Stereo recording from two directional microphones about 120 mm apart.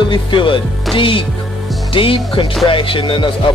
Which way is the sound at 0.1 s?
45° left (ahead or behind).